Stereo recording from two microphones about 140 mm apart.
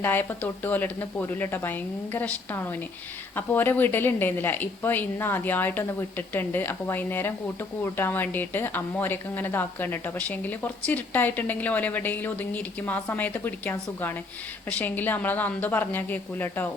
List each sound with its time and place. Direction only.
0.0 s a woman's voice: 15° left (ahead or behind)